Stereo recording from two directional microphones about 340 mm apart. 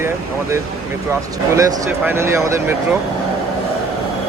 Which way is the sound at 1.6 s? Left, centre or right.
Centre.